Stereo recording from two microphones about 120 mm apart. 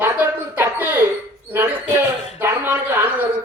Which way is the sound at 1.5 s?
15° right (ahead or behind).